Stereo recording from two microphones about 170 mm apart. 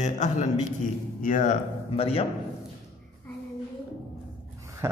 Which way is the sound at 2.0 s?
35° left (ahead or behind).